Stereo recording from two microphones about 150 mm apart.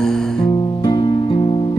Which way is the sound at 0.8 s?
30° left (ahead or behind).